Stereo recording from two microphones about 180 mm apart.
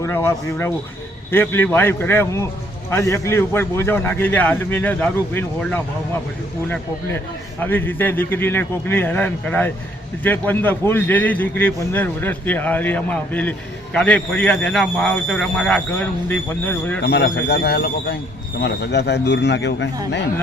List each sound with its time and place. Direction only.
0.0 s a man's voice: 15° left (ahead or behind)
7.6 s a man's voice: 10° left (ahead or behind)
17.0 s speech: 70° left (ahead or behind)